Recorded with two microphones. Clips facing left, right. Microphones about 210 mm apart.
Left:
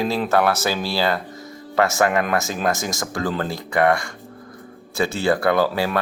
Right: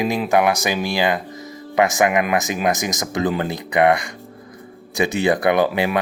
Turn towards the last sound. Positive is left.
turn(degrees=-15)  # may be behind; listen again after turning